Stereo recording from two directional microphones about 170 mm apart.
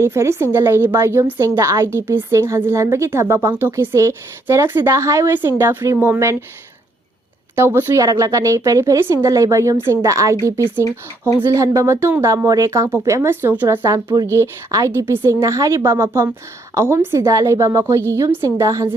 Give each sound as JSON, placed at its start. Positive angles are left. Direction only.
{"t": 0.0, "sound": "a woman's voice", "side_deg": -15}
{"t": 7.5, "sound": "a woman's voice", "side_deg": -15}